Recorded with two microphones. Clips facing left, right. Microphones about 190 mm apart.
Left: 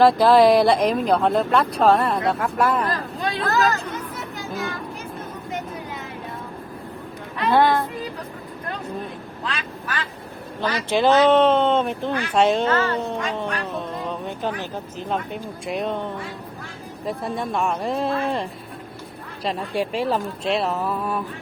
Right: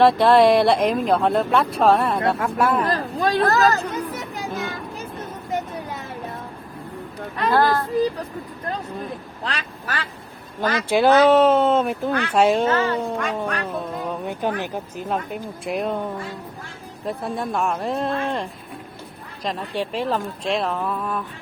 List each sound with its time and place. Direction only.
0.0 s speech: centre (ahead or behind)
2.9 s speech: 45° right (ahead or behind)
7.5 s speech: centre (ahead or behind)
9.4 s speech: 40° right (ahead or behind)
10.6 s speech: 50° right (ahead or behind)
10.8 s speech: 10° right (ahead or behind)
13.3 s speech: 5° right (ahead or behind)